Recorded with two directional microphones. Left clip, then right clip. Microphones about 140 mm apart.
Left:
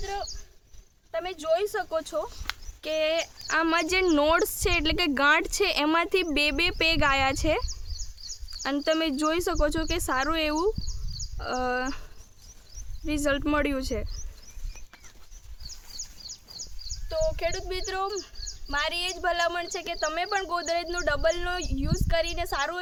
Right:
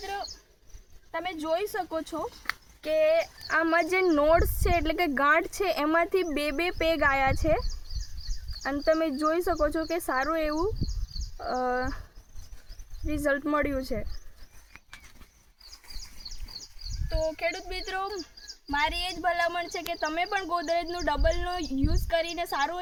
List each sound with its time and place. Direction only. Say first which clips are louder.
1.2 s speech: left 3 dB; 30° left (ahead or behind)
2.8 s speech: right 3 dB; 40° left (ahead or behind)
3.6 s speech: even; 60° left (ahead or behind)
8.8 s speech: right 1 dB; 55° left (ahead or behind)
13.1 s speech: left 1 dB; 45° left (ahead or behind)
17.1 s speech: left 2 dB; 45° left (ahead or behind)